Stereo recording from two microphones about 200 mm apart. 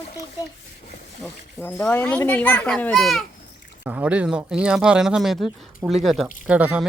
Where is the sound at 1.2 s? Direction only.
5° left (ahead or behind).